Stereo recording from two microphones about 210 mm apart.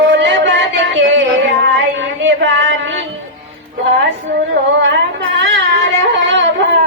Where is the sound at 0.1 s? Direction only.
55° right (ahead or behind).